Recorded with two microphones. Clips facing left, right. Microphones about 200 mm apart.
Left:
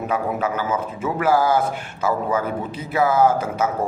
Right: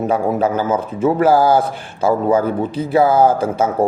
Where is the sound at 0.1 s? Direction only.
30° right (ahead or behind).